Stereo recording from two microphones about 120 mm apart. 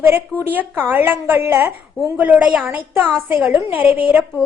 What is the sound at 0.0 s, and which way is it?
A woman's voice, 20° right (ahead or behind).